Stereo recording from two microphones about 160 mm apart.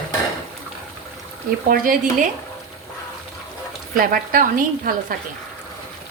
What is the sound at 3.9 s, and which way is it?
Speech, 60° right (ahead or behind).